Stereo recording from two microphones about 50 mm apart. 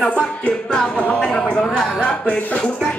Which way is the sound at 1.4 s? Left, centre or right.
Left.